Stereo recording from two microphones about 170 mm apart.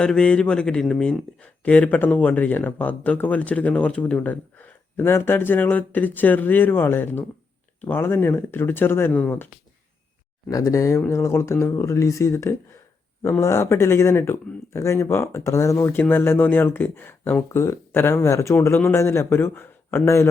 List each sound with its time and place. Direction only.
0.0 s speech: 5° left (ahead or behind)
10.5 s speech: 15° left (ahead or behind)